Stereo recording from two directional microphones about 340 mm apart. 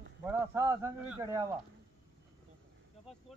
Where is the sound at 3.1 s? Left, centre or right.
Centre.